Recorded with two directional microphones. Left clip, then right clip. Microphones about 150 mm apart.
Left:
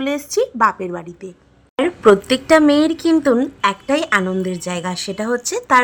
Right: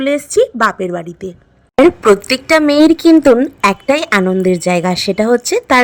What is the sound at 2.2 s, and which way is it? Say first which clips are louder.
A woman's voice: right 1 dB; 35° right (ahead or behind).